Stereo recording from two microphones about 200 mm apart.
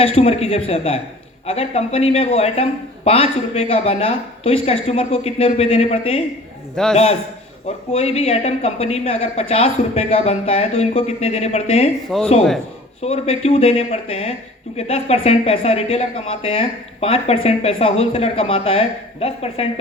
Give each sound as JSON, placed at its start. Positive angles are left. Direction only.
{"t": 0.0, "sound": "a woman's voice", "side_deg": 30}
{"t": 12.1, "sound": "a man's voice", "side_deg": 0}
{"t": 13.0, "sound": "a woman's voice", "side_deg": 30}